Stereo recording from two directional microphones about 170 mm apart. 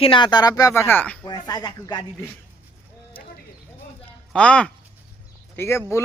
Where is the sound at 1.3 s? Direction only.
25° left (ahead or behind).